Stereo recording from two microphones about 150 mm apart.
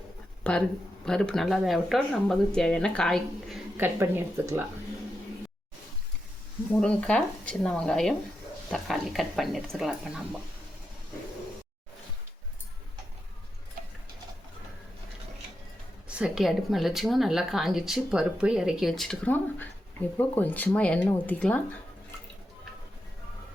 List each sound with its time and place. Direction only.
0.4 s speech: 5° left (ahead or behind)
3.8 s speech: 15° right (ahead or behind)
6.7 s speech: 5° left (ahead or behind)
16.0 s speech: 5° right (ahead or behind); by 21.8 s 10° left (ahead or behind)